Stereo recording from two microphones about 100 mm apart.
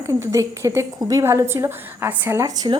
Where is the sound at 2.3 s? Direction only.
35° right (ahead or behind).